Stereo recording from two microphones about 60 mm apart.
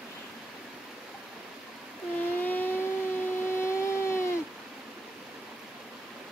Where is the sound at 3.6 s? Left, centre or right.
Left.